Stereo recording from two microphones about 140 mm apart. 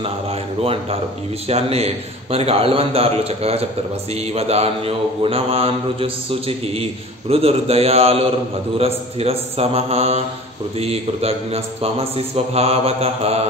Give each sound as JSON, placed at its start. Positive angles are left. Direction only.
{"t": 0.0, "sound": "mantra", "side_deg": -45}